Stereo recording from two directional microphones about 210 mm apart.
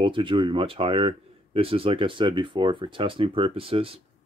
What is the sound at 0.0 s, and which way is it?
Speech, 25° right (ahead or behind).